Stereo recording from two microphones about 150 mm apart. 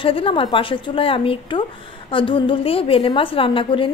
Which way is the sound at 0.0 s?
35° left (ahead or behind).